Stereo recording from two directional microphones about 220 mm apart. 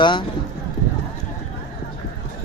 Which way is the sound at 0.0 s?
20° left (ahead or behind).